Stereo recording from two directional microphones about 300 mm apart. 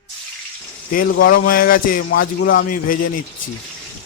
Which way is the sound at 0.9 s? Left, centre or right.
Left.